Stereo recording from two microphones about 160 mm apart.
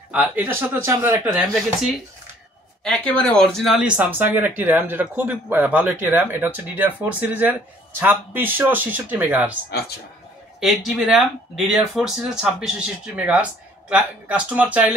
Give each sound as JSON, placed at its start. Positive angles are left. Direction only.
{"t": 0.1, "sound": "speech", "side_deg": -5}
{"t": 2.8, "sound": "speech", "side_deg": 5}
{"t": 9.7, "sound": "speech", "side_deg": 75}
{"t": 10.6, "sound": "speech", "side_deg": 0}